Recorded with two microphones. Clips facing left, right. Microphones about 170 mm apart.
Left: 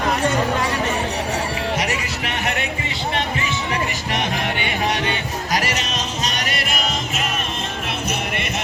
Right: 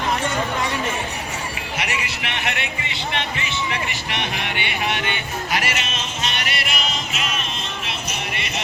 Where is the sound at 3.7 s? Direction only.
40° left (ahead or behind).